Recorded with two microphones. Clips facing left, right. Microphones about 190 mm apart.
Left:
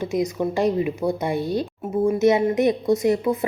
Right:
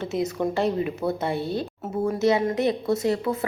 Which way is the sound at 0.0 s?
15° left (ahead or behind).